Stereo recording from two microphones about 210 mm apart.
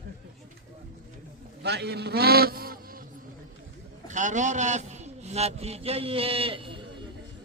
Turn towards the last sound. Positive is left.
turn(degrees=-25)  # may be behind; listen again after turning